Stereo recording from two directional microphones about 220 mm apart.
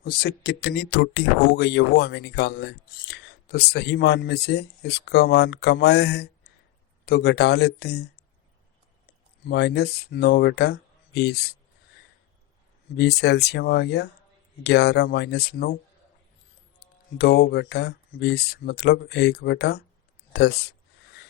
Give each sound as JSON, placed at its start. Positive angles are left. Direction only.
{"t": 0.0, "sound": "speech", "side_deg": 45}
{"t": 9.0, "sound": "speech", "side_deg": 50}
{"t": 13.0, "sound": "speech", "side_deg": 50}
{"t": 16.8, "sound": "speech", "side_deg": 45}